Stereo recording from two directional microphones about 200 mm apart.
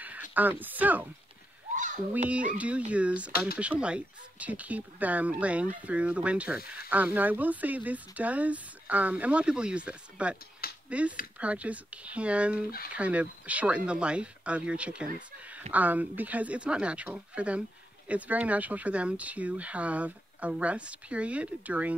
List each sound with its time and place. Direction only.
0.3 s speech: 10° right (ahead or behind)
1.8 s a sound: 40° right (ahead or behind)
2.2 s speech: 5° right (ahead or behind)